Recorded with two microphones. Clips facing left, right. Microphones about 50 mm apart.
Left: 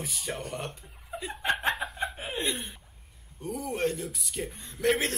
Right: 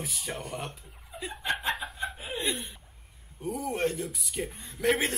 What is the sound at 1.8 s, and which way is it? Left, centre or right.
Chuckle, left.